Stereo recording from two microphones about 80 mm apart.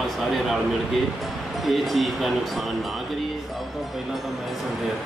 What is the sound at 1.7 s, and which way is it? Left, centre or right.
Speech, centre.